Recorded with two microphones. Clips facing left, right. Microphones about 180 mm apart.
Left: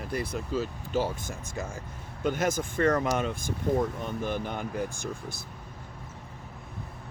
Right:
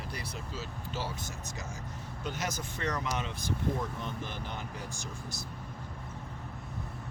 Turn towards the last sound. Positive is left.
turn(degrees=55)  # may be behind; listen again after turning